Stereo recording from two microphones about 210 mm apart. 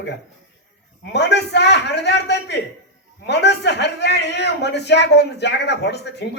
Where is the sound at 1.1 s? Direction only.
55° left (ahead or behind).